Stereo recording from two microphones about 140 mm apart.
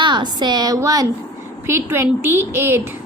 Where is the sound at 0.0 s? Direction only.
30° right (ahead or behind).